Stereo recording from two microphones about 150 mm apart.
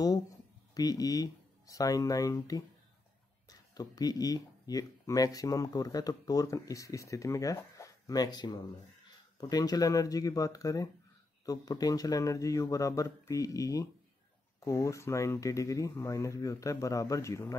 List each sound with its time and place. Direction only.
0.7 s speech: 25° left (ahead or behind)